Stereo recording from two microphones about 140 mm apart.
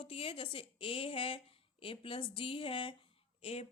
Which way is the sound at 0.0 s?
40° left (ahead or behind).